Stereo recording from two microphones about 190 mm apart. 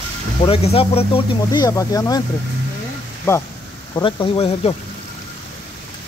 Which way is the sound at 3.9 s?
25° left (ahead or behind).